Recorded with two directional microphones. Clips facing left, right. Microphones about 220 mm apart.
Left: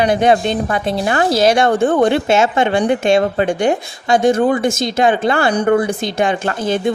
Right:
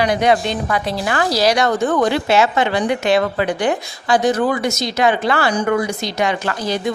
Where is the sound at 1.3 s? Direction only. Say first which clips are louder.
Left 3 dB; 50° left (ahead or behind).